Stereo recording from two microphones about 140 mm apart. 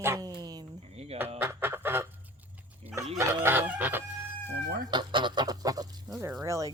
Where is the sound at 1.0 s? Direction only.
50° right (ahead or behind).